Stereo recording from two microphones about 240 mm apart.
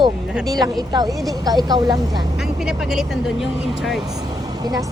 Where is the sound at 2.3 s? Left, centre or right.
Centre.